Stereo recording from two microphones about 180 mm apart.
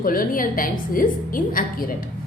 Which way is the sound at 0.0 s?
50° left (ahead or behind).